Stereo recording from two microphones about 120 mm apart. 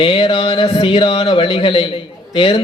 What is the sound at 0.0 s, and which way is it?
A man's voice, 45° left (ahead or behind).